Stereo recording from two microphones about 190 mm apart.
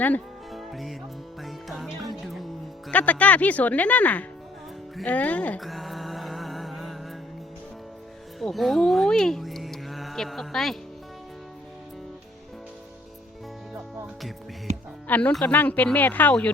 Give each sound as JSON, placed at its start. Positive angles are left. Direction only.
{"t": 0.0, "sound": "music", "side_deg": 5}
{"t": 2.9, "sound": "speech", "side_deg": 10}
{"t": 4.9, "sound": "a sound", "side_deg": 5}
{"t": 8.4, "sound": "speech", "side_deg": 0}
{"t": 13.7, "sound": "music", "side_deg": 0}
{"t": 14.7, "sound": "music", "side_deg": -35}
{"t": 15.0, "sound": "speech", "side_deg": 10}